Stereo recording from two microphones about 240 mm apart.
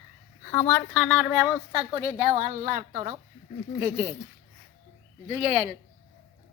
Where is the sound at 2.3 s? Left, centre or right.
Right.